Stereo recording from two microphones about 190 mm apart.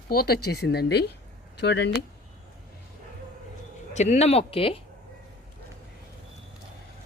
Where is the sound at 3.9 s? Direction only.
35° left (ahead or behind).